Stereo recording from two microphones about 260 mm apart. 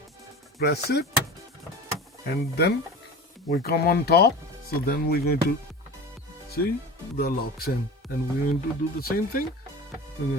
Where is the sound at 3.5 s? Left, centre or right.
Left.